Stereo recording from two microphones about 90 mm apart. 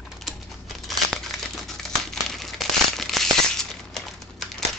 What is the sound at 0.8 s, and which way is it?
Crumpling, centre (ahead or behind).